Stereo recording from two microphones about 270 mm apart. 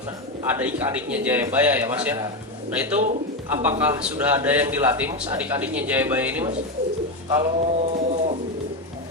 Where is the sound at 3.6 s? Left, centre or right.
Centre.